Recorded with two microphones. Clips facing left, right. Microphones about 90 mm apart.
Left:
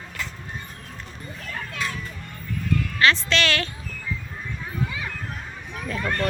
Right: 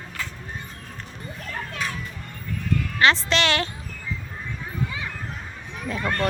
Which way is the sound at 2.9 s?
20° right (ahead or behind).